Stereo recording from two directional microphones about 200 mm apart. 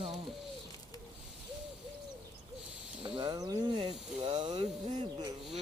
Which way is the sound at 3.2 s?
20° right (ahead or behind).